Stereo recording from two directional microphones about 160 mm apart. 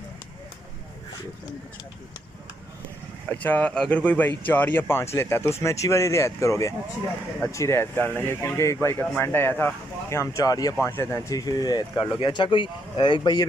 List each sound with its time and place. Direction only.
3.3 s speech: 10° left (ahead or behind); by 13.5 s 30° left (ahead or behind)